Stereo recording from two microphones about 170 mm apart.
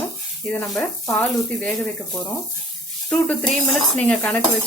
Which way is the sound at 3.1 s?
10° left (ahead or behind).